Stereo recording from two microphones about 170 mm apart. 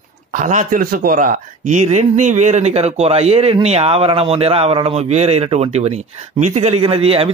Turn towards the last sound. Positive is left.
turn(degrees=-35)  # may be behind; listen again after turning